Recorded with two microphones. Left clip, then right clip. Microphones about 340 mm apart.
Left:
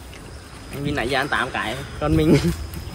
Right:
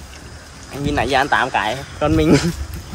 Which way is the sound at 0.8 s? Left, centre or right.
Centre.